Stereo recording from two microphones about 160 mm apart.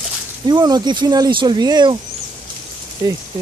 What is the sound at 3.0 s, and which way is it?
Speech, 25° right (ahead or behind).